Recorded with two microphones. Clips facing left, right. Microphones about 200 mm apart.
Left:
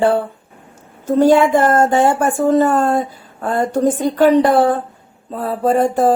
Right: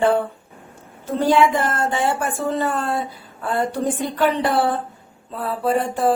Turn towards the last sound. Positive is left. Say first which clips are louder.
# left 5 dB
turn(degrees=45)  # may be behind; listen again after turning